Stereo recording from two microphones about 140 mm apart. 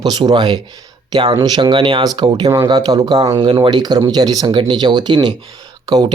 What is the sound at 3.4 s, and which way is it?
Speech, 40° right (ahead or behind).